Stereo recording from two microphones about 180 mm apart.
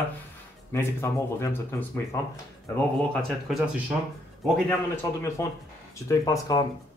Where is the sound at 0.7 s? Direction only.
15° left (ahead or behind).